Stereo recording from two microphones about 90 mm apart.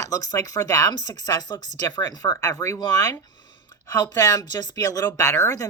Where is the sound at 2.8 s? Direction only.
45° left (ahead or behind).